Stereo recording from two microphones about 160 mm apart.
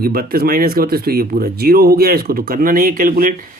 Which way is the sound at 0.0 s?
70° right (ahead or behind).